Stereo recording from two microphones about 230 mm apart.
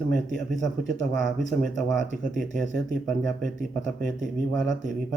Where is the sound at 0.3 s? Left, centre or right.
Centre.